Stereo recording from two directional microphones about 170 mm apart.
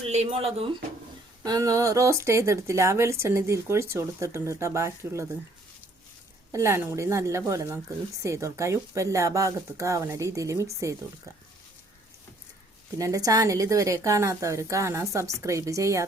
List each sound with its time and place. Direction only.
0.1 s speech: 40° right (ahead or behind)
1.5 s speech: 20° right (ahead or behind)
6.5 s speech: 15° right (ahead or behind)
13.0 s a woman's voice: 20° right (ahead or behind)